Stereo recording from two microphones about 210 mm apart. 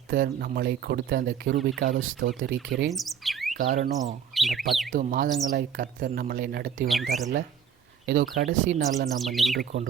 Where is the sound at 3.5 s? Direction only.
35° right (ahead or behind).